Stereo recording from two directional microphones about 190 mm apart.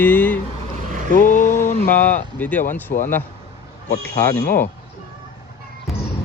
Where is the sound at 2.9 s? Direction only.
55° left (ahead or behind).